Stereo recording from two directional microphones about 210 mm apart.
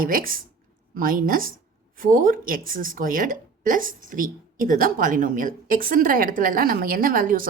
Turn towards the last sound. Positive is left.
turn(degrees=-40)  # may be behind; listen again after turning